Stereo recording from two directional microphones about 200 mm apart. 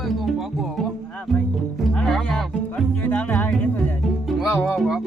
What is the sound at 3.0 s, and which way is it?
Music, 10° left (ahead or behind).